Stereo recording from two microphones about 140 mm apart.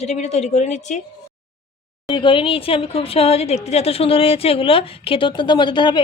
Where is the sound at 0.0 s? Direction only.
50° left (ahead or behind).